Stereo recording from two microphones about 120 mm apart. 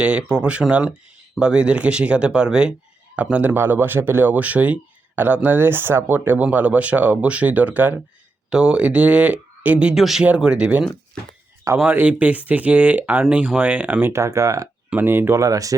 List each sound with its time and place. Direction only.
0.0 s speech: 10° right (ahead or behind); by 15.7 s 30° right (ahead or behind)